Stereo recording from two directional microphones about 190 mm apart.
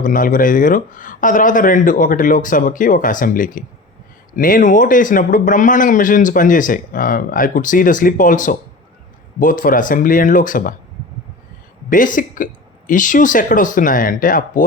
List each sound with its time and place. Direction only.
0.0 s speech: 45° left (ahead or behind)
11.9 s speech: 45° left (ahead or behind)